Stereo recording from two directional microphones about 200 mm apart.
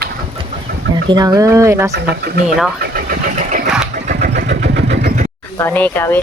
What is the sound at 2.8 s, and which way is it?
Vehicle, 45° right (ahead or behind).